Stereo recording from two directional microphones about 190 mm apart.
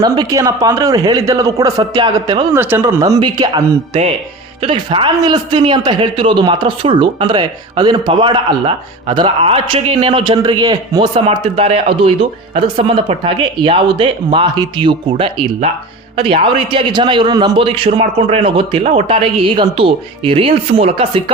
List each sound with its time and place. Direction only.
0.0 s a man's voice: 20° right (ahead or behind)
2.5 s a man's voice: 10° right (ahead or behind); by 21.2 s 30° right (ahead or behind)